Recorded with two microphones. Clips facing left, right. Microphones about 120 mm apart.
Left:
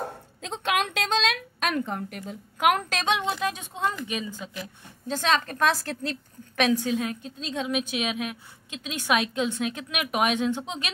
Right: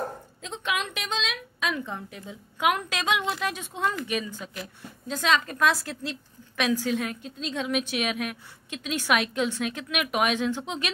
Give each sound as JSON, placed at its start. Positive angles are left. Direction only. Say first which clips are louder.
{"t": 0.4, "sound": "a woman's voice", "louder": "left 4 dB", "side_deg": 70}
{"t": 2.6, "sound": "a woman's voice", "louder": "left 2 dB", "side_deg": 40}
{"t": 5.1, "sound": "a woman's voice", "louder": "even", "side_deg": 40}
{"t": 6.7, "sound": "a woman's voice", "louder": "left 1 dB", "side_deg": 25}